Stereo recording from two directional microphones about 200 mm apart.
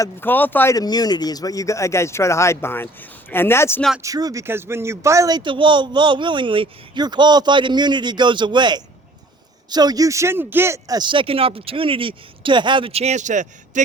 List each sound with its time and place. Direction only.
0.0 s speech: 10° left (ahead or behind)
4.0 s speech: 15° right (ahead or behind); by 13.8 s 35° right (ahead or behind)